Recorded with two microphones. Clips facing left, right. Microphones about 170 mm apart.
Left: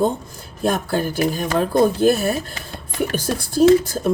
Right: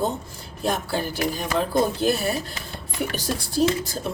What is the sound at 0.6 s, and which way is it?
Speech, 50° left (ahead or behind).